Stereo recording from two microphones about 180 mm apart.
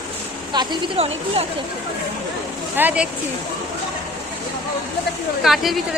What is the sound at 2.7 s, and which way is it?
Speech, 10° right (ahead or behind).